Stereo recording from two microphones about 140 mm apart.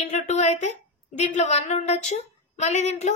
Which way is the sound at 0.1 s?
55° left (ahead or behind).